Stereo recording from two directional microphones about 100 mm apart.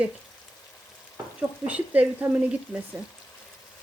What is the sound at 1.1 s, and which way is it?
Speech, 15° right (ahead or behind).